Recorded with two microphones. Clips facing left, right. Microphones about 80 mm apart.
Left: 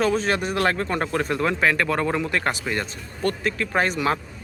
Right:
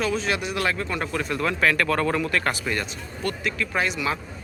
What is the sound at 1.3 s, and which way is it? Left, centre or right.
Speech, left.